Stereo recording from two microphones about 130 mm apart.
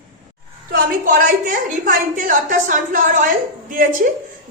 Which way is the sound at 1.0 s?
90° right.